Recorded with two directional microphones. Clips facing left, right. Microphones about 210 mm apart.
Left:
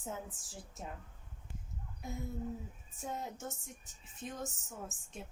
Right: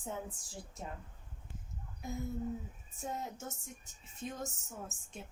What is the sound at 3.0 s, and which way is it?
Speech, centre (ahead or behind).